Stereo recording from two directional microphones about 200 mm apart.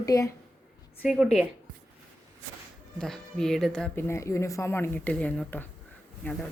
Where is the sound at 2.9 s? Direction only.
Centre (ahead or behind).